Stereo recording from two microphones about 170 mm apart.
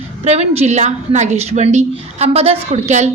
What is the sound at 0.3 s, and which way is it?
A woman's voice, 40° right (ahead or behind).